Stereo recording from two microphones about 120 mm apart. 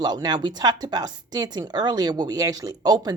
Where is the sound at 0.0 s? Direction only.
35° right (ahead or behind).